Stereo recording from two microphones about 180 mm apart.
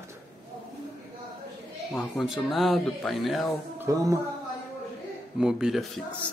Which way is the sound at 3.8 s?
15° right (ahead or behind).